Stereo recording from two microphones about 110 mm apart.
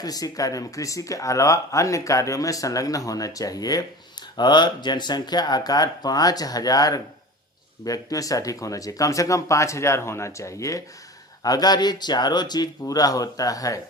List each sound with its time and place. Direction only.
0.0 s speech: 35° left (ahead or behind)